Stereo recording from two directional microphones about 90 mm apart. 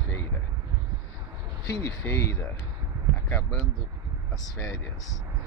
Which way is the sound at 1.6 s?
30° left (ahead or behind).